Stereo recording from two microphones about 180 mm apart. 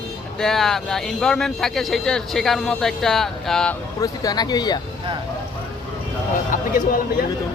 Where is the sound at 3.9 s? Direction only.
20° left (ahead or behind).